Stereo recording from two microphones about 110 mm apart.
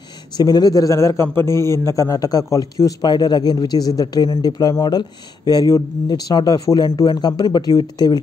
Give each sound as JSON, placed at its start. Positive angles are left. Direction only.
{"t": 0.4, "sound": "a man's voice", "side_deg": 35}